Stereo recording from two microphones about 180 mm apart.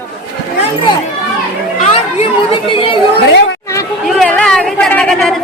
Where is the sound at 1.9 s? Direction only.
30° left (ahead or behind).